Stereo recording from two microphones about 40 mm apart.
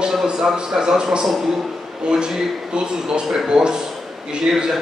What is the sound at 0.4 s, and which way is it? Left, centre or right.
Speech, centre.